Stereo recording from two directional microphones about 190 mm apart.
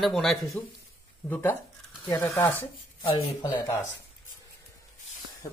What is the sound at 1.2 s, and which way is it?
Speech, 15° left (ahead or behind).